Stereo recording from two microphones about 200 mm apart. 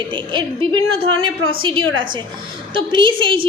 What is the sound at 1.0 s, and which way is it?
A woman's voice, 90° right.